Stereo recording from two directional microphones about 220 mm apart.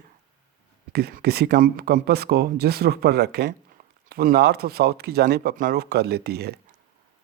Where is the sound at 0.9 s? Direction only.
45° right (ahead or behind).